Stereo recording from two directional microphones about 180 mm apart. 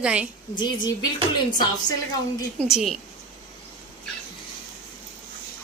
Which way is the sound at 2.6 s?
Centre (ahead or behind).